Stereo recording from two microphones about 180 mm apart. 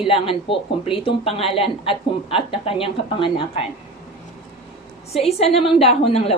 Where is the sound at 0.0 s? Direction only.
30° left (ahead or behind).